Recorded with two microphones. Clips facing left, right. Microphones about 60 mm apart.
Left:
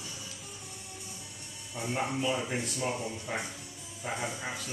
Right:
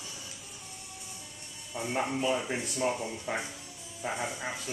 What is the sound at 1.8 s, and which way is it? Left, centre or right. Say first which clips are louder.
Speech: right 1 dB; centre.